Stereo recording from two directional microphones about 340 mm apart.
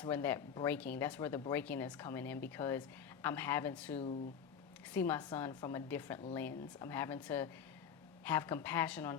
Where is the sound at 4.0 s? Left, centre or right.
Centre.